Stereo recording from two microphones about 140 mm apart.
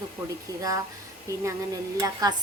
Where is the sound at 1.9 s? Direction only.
25° right (ahead or behind).